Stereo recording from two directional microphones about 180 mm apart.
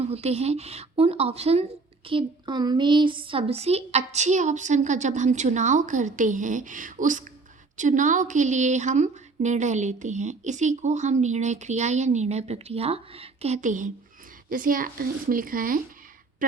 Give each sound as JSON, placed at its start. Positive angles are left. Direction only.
{"t": 0.0, "sound": "speech", "side_deg": -35}